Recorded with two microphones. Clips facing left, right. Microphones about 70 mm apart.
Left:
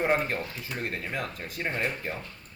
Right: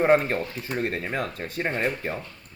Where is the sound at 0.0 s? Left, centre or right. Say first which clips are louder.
Right 6 dB; right.